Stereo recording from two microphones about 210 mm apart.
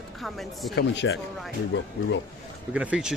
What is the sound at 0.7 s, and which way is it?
Speech, 55° left (ahead or behind).